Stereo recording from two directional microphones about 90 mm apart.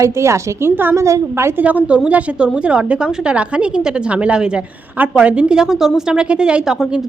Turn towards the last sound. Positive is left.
turn(degrees=-10)  # may be behind; listen again after turning